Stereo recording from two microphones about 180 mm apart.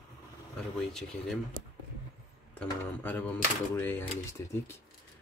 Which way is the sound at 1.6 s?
50° right (ahead or behind).